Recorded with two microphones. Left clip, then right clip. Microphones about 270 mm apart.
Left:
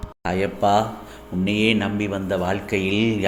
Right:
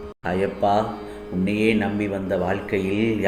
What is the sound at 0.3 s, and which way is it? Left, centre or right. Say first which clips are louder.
Speech: left 1 dB; left.